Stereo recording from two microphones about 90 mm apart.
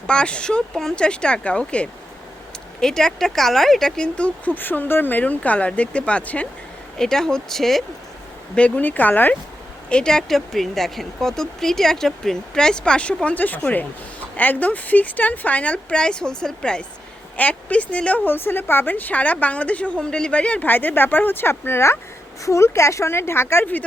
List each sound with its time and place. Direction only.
0.1 s speech: 10° left (ahead or behind)
8.5 s speech: 15° left (ahead or behind)
9.9 s speech: 10° left (ahead or behind)